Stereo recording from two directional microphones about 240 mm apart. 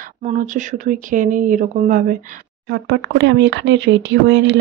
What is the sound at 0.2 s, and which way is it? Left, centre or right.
Speech, right.